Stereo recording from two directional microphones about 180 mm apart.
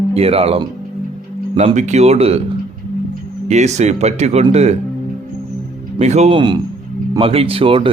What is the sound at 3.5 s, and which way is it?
Speech, 40° right (ahead or behind).